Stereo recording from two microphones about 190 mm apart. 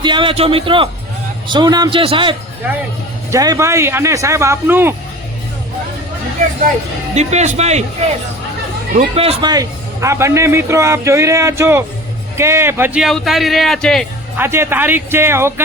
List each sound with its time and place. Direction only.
0.0 s a man's voice: 25° right (ahead or behind)
3.3 s a man's voice: 20° right (ahead or behind)
7.2 s a man's voice: 35° right (ahead or behind)
9.0 s a man's voice: 30° right (ahead or behind); by 14.1 s centre (ahead or behind)
14.3 s a man's voice: 10° right (ahead or behind)